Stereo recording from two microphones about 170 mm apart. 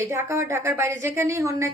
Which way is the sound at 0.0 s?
15° right (ahead or behind).